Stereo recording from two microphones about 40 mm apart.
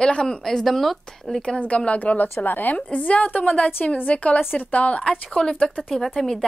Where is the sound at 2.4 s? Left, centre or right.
Left.